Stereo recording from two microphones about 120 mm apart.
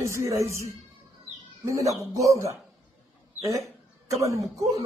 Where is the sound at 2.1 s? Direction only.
25° right (ahead or behind).